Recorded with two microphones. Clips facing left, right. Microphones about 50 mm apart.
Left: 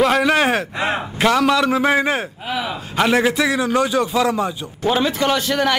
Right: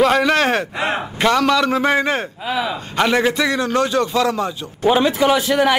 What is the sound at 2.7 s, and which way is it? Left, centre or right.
A man's voice, centre.